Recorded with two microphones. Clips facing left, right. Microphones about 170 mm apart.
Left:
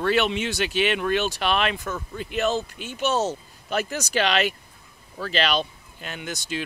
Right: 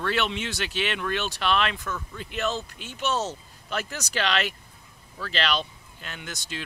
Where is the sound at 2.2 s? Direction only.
10° left (ahead or behind).